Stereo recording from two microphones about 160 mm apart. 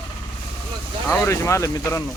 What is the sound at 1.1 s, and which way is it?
Speech, 15° left (ahead or behind).